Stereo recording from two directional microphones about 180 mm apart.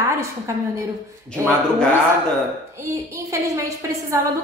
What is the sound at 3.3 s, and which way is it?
Speech, 15° right (ahead or behind).